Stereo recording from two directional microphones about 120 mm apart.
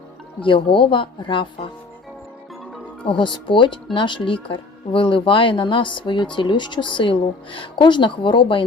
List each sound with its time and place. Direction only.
0.4 s a woman's voice: 45° left (ahead or behind)
3.1 s a woman's voice: 40° left (ahead or behind)